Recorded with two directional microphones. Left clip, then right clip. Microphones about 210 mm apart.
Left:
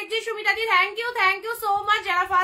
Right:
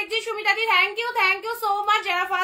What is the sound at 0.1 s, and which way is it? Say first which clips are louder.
A woman's voice: left 1 dB; 15° left (ahead or behind).